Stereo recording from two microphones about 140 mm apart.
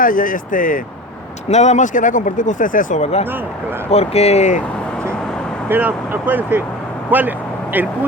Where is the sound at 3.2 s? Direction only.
15° right (ahead or behind).